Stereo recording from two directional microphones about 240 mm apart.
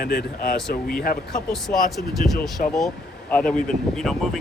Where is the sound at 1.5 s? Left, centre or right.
Centre.